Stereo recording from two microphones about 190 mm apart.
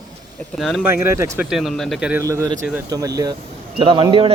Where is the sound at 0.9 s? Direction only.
15° right (ahead or behind).